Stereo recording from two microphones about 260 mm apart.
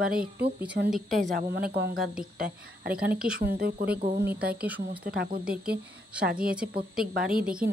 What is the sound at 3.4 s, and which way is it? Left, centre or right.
A woman's voice, right.